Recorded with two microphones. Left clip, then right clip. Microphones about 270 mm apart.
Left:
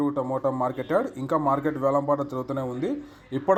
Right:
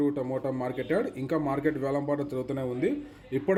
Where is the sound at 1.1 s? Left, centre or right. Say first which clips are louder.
Left 6 dB; centre.